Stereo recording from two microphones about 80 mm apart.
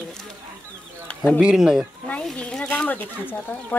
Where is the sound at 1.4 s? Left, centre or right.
Centre.